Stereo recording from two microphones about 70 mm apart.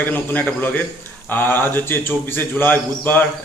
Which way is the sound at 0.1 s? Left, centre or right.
Left.